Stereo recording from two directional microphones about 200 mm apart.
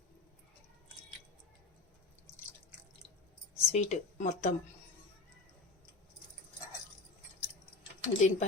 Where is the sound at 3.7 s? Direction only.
35° left (ahead or behind).